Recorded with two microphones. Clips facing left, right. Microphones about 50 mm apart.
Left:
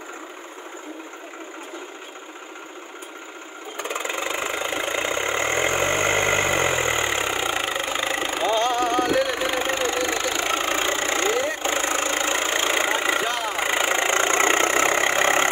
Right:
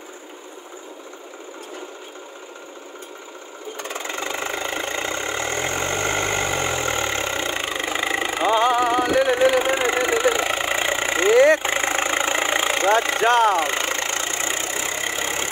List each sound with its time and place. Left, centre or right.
3.7 s engine: left; by 9.8 s centre
9.8 s vehicle: centre
10.4 s engine: centre
11.0 s vehicle: centre
11.3 s vehicle: right
11.6 s vehicle: right
12.6 s vehicle: centre
13.2 s vehicle: right
13.6 s vehicle: centre
14.0 s engine: left